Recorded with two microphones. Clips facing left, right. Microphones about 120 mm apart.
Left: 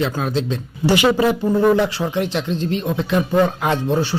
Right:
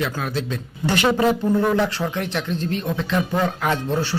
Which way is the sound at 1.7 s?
15° left (ahead or behind).